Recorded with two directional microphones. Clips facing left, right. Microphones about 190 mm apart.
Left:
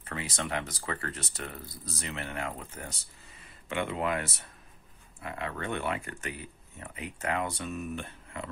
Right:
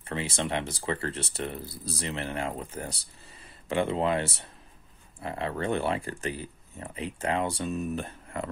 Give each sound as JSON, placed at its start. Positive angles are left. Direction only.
{"t": 0.0, "sound": "speech", "side_deg": -25}